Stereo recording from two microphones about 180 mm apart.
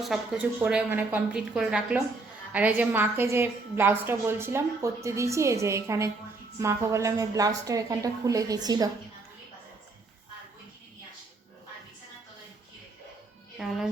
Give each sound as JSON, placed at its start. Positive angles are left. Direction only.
{"t": 0.0, "sound": "a woman's voice", "side_deg": -5}
{"t": 13.6, "sound": "a child's voice", "side_deg": 0}